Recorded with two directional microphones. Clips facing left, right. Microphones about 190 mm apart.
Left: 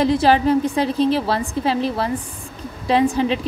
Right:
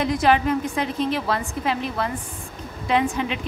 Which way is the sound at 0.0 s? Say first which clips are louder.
Left 4 dB; 30° left (ahead or behind).